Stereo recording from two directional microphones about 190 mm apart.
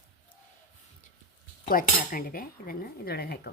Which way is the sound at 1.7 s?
50° left (ahead or behind).